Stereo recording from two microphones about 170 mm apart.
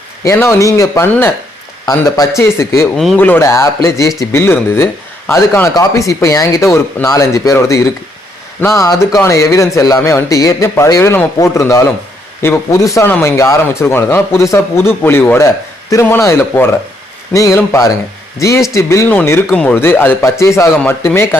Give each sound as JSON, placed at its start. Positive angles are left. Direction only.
{"t": 0.3, "sound": "speech", "side_deg": 15}
{"t": 2.8, "sound": "speech", "side_deg": 0}
{"t": 3.2, "sound": "speech", "side_deg": 10}